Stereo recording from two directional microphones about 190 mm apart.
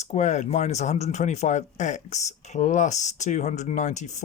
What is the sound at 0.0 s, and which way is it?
Speech, 35° left (ahead or behind).